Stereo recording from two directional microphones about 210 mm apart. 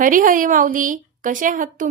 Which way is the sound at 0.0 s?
40° right (ahead or behind).